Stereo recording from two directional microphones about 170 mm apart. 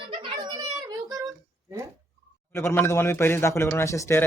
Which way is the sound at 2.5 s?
15° left (ahead or behind).